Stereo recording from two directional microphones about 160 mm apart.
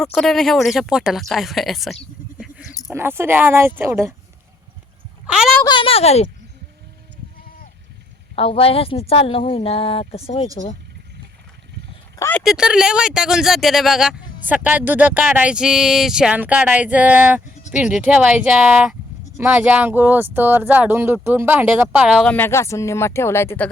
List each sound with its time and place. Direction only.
0.0 s speech: centre (ahead or behind)
2.4 s a sound: 5° right (ahead or behind)
2.9 s speech: 15° right (ahead or behind)
5.2 s a sound: 5° right (ahead or behind)
5.6 s a woman's voice: 30° left (ahead or behind)
7.3 s sheep: 65° left (ahead or behind)
8.4 s a woman's voice: 35° left (ahead or behind)
12.4 s speech: 5° right (ahead or behind)
22.3 s speech: 15° left (ahead or behind)